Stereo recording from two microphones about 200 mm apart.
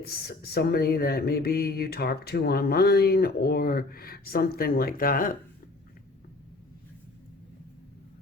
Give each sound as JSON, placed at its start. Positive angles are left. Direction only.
{"t": 0.0, "sound": "speech", "side_deg": 50}